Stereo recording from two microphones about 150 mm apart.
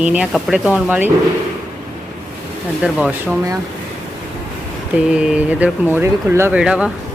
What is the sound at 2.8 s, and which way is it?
Speech, 5° right (ahead or behind).